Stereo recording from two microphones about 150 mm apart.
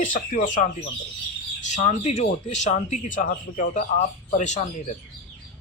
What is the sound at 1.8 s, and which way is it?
Speech, 40° left (ahead or behind).